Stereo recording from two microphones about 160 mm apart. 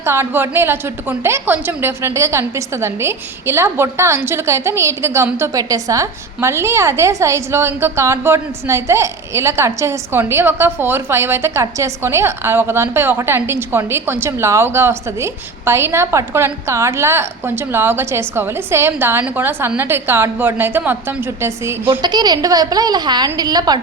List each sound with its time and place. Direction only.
0.0 s a woman's voice: 15° right (ahead or behind)